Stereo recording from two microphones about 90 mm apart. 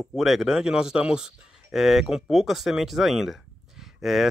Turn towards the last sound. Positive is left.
turn(degrees=0)  # may be behind; listen again after turning